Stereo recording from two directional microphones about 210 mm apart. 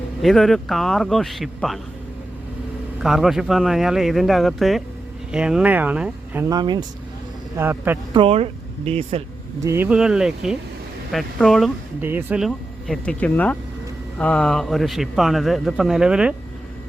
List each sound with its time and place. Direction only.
0.2 s a man's voice: centre (ahead or behind)
3.0 s a man's voice: centre (ahead or behind)
6.5 s speech: 20° right (ahead or behind)
7.5 s speech: 10° right (ahead or behind)
8.1 s speech: 25° right (ahead or behind)
9.6 s a man's voice: 10° right (ahead or behind)